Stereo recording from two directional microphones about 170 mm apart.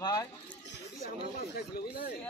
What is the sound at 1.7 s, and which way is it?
Speech, 65° left (ahead or behind).